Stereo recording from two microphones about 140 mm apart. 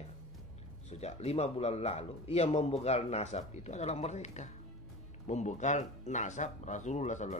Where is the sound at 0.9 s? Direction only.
50° left (ahead or behind).